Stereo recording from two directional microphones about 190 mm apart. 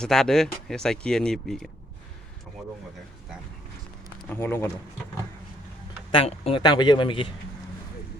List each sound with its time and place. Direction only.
0.0 s speech: 5° left (ahead or behind)
4.3 s speech: 10° left (ahead or behind)
6.1 s speech: 30° left (ahead or behind)